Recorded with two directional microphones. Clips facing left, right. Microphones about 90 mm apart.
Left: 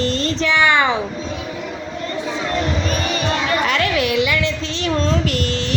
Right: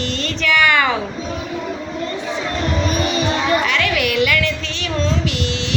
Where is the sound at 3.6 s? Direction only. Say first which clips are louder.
Left 1 dB; 35° left (ahead or behind).